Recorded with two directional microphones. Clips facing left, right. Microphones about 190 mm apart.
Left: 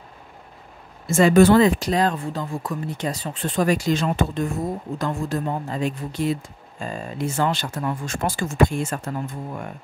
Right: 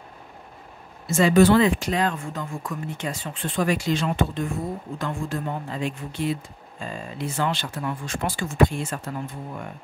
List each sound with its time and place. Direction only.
1.0 s speech: 50° left (ahead or behind)